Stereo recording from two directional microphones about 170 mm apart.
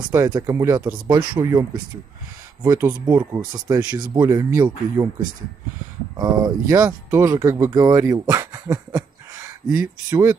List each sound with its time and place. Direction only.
0.1 s speech: 20° right (ahead or behind)
6.1 s speech: 25° right (ahead or behind)